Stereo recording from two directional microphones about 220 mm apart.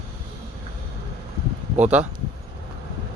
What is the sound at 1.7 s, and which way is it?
Speech, 5° right (ahead or behind).